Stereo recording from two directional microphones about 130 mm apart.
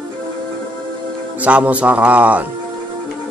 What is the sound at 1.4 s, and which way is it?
Speech, 10° right (ahead or behind).